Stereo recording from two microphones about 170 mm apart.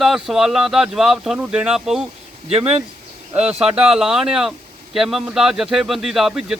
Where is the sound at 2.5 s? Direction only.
35° right (ahead or behind).